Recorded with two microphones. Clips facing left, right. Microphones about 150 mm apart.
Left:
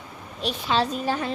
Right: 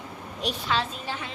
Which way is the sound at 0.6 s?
35° left (ahead or behind).